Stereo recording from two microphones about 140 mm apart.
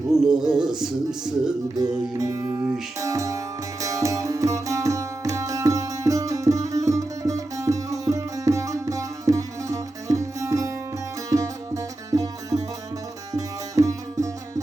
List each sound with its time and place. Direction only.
0.1 s music: 5° right (ahead or behind)
1.8 s music: 25° right (ahead or behind)